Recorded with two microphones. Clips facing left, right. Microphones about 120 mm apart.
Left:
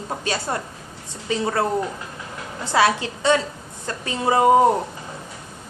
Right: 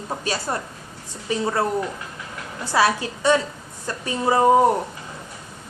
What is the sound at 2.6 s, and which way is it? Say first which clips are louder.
A woman's voice: left 1 dB; 25° left (ahead or behind).